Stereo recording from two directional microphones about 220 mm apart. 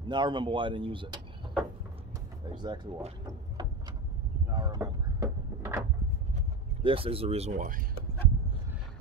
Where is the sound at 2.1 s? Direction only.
20° right (ahead or behind).